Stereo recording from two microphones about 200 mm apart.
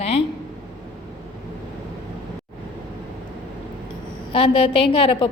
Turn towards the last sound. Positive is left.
turn(degrees=25)  # may be behind; listen again after turning